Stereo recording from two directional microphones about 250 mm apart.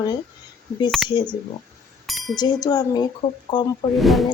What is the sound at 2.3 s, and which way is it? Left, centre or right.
Speech, centre.